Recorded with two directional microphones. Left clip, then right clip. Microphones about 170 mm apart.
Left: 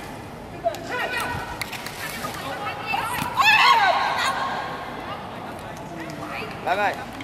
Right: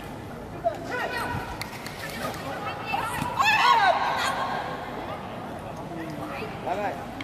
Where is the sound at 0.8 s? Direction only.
10° right (ahead or behind).